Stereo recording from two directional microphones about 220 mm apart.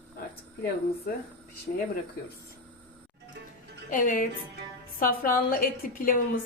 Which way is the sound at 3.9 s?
35° left (ahead or behind).